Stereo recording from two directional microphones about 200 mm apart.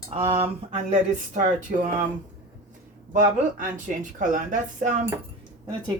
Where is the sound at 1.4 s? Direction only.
40° right (ahead or behind).